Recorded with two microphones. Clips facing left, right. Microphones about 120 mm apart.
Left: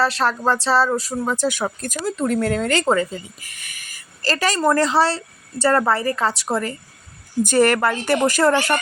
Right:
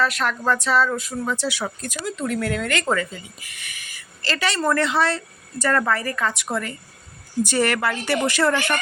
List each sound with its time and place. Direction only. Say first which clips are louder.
0.0 s speech: left 3 dB; 35° left (ahead or behind)
7.4 s a woman's voice: left 5 dB; 45° left (ahead or behind)